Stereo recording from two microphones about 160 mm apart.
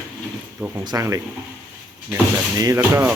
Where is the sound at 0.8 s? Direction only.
20° right (ahead or behind).